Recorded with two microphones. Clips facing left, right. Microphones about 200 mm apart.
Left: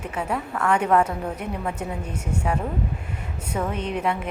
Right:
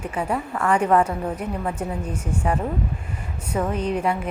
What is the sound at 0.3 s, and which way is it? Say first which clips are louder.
Speech: even; 10° right (ahead or behind).